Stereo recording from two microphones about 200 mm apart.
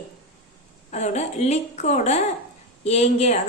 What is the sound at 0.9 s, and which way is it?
A woman's voice, 35° left (ahead or behind).